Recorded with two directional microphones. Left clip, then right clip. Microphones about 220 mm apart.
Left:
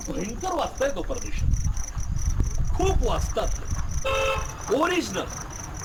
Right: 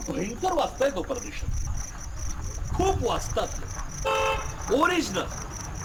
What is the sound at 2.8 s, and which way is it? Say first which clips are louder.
Speech: right 1 dB; 5° right (ahead or behind).